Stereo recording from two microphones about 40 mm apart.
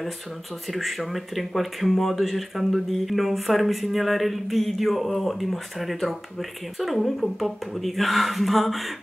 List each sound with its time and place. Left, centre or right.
0.7 s speech: centre